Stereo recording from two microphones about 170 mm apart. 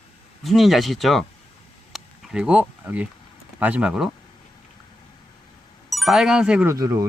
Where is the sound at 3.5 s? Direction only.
10° right (ahead or behind).